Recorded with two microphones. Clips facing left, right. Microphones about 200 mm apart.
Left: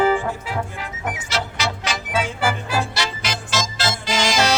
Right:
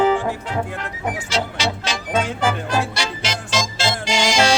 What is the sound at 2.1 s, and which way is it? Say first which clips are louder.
Music: right 2 dB; 5° left (ahead or behind).